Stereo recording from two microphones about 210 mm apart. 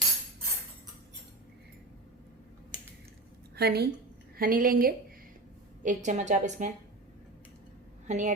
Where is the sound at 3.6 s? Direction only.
50° right (ahead or behind).